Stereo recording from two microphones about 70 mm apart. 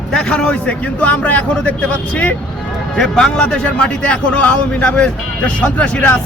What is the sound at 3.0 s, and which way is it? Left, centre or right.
A man's voice, centre.